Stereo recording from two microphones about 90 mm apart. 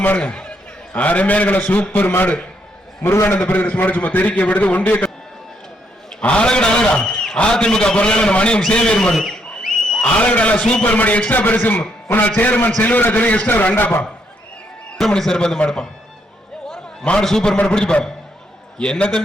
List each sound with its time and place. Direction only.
0.0 s a man's voice: 15° left (ahead or behind)
3.0 s a man's voice: 30° left (ahead or behind)
3.3 s a man's voice: 20° left (ahead or behind)
6.1 s a man's voice: 10° left (ahead or behind)
14.9 s a man's voice: 5° left (ahead or behind)